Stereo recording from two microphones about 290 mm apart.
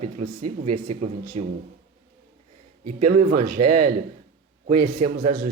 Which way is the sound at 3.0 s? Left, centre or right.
Right.